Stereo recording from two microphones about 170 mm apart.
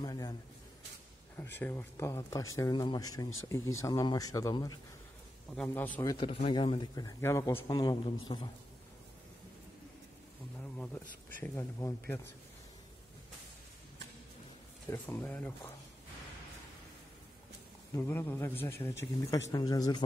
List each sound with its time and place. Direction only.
0.0 s a sound: 25° left (ahead or behind)
1.3 s speech: 15° left (ahead or behind)
5.5 s a man's voice: 5° left (ahead or behind)
6.1 s speech: 30° left (ahead or behind)
11.3 s a man's voice: 15° left (ahead or behind)
14.9 s a man's voice: 10° left (ahead or behind)
17.9 s a man's voice: 15° left (ahead or behind)